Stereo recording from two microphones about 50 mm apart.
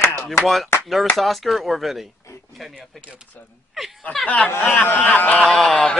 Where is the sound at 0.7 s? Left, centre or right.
Left.